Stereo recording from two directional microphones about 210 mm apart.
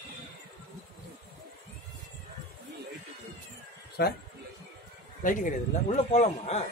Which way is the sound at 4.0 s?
50° left (ahead or behind).